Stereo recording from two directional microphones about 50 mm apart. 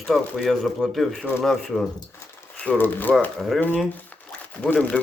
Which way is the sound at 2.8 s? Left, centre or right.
Left.